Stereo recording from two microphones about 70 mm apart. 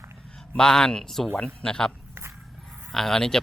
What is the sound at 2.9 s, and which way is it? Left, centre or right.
Speech, centre.